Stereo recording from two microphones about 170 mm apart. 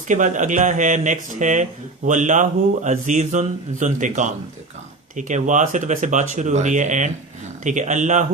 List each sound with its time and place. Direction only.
0.1 s a man's voice: 45° right (ahead or behind)